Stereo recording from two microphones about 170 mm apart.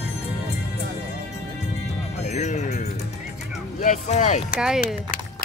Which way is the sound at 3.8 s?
45° left (ahead or behind).